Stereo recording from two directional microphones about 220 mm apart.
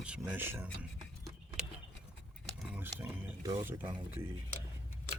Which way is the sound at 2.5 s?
10° right (ahead or behind).